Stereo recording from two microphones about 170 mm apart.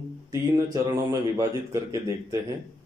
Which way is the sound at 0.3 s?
20° right (ahead or behind).